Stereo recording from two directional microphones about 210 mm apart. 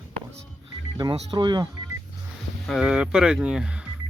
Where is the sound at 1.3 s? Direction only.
20° right (ahead or behind).